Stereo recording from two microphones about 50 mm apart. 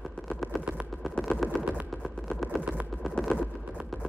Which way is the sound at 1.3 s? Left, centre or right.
Centre.